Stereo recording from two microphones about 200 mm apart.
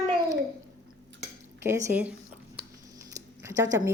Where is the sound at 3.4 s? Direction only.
15° right (ahead or behind).